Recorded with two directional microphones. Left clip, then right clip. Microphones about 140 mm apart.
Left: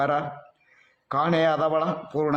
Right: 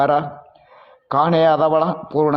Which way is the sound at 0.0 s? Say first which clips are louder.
Right 7 dB; 30° right (ahead or behind).